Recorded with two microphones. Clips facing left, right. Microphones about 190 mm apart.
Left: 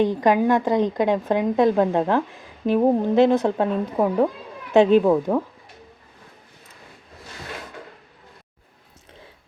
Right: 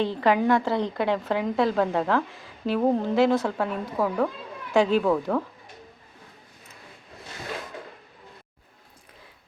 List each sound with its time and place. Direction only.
0.0 s a woman's voice: 15° left (ahead or behind)